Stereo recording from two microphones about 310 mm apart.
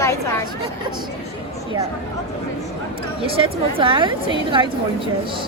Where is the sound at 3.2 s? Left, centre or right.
Centre.